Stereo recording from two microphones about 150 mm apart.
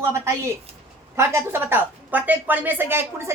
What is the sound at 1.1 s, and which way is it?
Speech, 15° right (ahead or behind).